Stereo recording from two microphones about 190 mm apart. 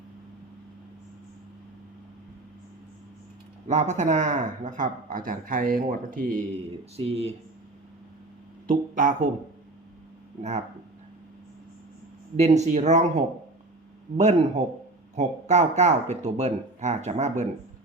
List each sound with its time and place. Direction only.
3.7 s speech: 40° right (ahead or behind)
6.9 s speech: 30° right (ahead or behind)
8.6 s speech: 45° right (ahead or behind)
12.4 s speech: 35° right (ahead or behind)